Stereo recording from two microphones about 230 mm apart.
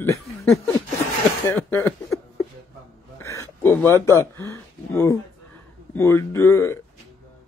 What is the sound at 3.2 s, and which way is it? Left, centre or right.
Speech, centre.